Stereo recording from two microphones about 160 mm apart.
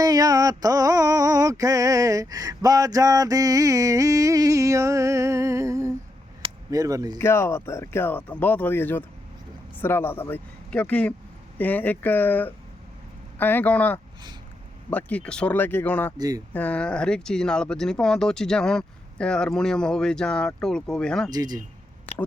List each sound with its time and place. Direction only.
0.0 s mantra: 20° right (ahead or behind)
6.7 s speech: 20° right (ahead or behind)
7.2 s speech: 15° left (ahead or behind)
16.1 s speech: 25° right (ahead or behind)
16.5 s speech: 10° left (ahead or behind)
21.2 s speech: 25° right (ahead or behind)